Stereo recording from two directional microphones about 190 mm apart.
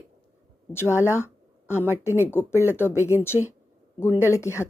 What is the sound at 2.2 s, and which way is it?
Speech, 10° left (ahead or behind).